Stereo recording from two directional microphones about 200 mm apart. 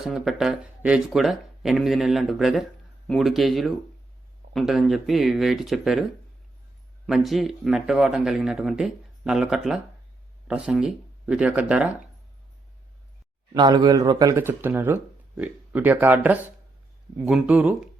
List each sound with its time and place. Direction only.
0.0 s speech: centre (ahead or behind)
7.1 s speech: centre (ahead or behind)
13.5 s speech: 20° right (ahead or behind)